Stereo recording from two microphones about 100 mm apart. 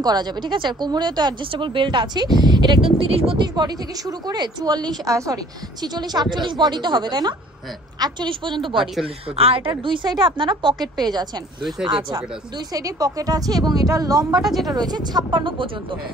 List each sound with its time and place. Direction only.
0.0 s speech: 45° right (ahead or behind)
1.5 s speech: 60° right (ahead or behind)
3.0 s speech: 70° right (ahead or behind)
3.3 s speech: 45° right (ahead or behind)
9.0 s speech: 75° right (ahead or behind)
9.8 s speech: 50° right (ahead or behind)
12.5 s a woman's voice: 40° right (ahead or behind)
14.3 s a woman's voice: centre (ahead or behind)
14.7 s speech: 40° right (ahead or behind); by 16.0 s 60° right (ahead or behind)